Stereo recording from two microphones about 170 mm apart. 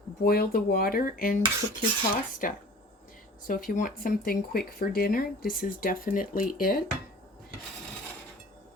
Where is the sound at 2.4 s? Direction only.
50° left (ahead or behind).